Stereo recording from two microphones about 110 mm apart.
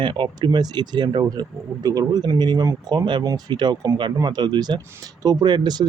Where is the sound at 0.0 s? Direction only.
50° right (ahead or behind).